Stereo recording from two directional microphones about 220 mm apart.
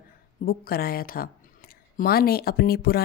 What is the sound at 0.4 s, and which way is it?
A woman's voice, 45° left (ahead or behind).